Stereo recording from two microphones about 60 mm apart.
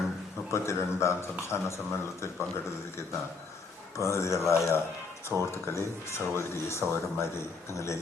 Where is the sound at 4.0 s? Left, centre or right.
Left.